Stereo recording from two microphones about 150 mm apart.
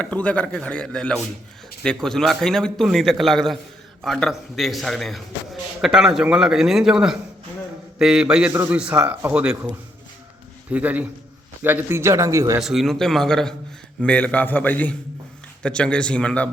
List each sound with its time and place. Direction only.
0.0 s a man's voice: 10° left (ahead or behind); by 9.6 s 10° right (ahead or behind)
10.7 s speech: 10° right (ahead or behind)
12.5 s a man's voice: centre (ahead or behind)